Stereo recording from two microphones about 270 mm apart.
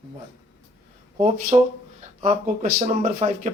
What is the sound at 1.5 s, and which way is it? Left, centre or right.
Speech, right.